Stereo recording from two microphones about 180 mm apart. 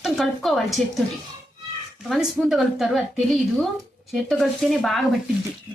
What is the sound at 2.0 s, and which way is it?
A woman's voice, centre (ahead or behind).